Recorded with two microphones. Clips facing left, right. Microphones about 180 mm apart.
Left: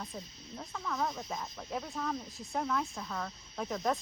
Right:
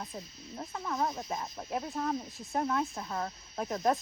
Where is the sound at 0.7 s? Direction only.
30° right (ahead or behind).